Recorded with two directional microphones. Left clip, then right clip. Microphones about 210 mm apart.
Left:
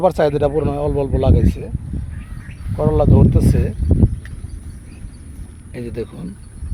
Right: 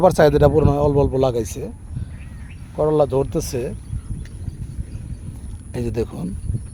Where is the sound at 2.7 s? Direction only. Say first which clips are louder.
Even; 20° right (ahead or behind).